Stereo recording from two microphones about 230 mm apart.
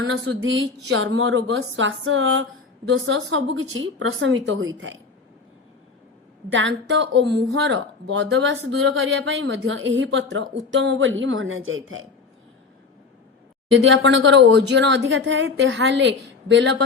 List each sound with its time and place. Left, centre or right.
0.1 s a woman's voice: right
6.5 s speech: right
13.7 s speech: right